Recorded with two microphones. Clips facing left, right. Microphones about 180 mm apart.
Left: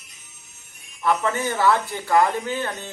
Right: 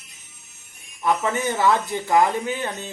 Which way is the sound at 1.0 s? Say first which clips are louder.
Even; 15° right (ahead or behind).